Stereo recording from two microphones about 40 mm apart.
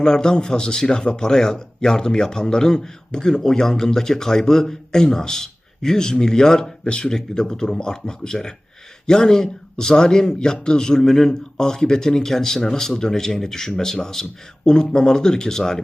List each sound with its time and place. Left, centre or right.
0.0 s a man's voice: centre